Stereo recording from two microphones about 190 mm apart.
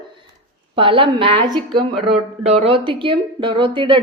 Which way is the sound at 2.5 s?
30° right (ahead or behind).